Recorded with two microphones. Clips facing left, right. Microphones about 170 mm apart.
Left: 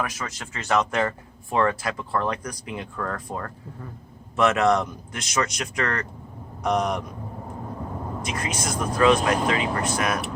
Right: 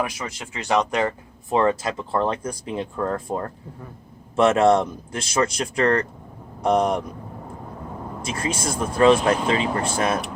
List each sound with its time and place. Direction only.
0.0 s speech: 10° right (ahead or behind); by 7.0 s 30° right (ahead or behind)
8.2 s speech: 30° right (ahead or behind)